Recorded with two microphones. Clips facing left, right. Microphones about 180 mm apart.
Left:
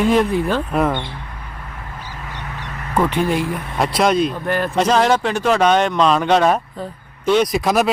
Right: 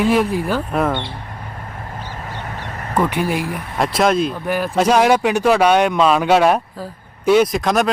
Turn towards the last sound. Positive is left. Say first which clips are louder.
# right 1 dB
turn(degrees=5)  # may be behind; listen again after turning